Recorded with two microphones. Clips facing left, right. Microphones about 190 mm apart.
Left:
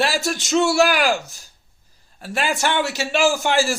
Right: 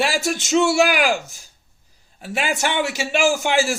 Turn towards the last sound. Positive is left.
turn(degrees=-15)  # may be behind; listen again after turning